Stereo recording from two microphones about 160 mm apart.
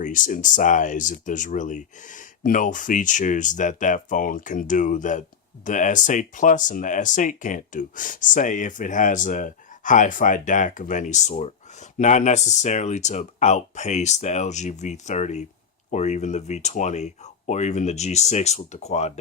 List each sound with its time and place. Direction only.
0.0 s speech: 55° left (ahead or behind)